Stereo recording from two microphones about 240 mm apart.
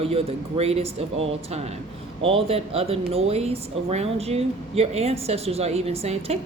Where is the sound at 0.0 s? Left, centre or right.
Right.